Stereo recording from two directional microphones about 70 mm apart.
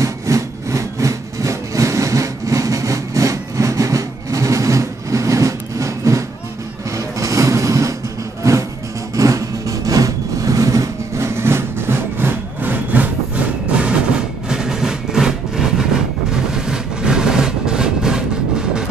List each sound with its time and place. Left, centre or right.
0.0 s wood: right
7.2 s music: right
9.1 s vehicle: right
13.7 s train: centre
14.5 s vehicle: centre